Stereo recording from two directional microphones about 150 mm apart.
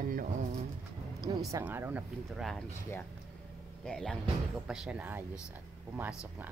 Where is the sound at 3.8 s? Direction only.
5° left (ahead or behind).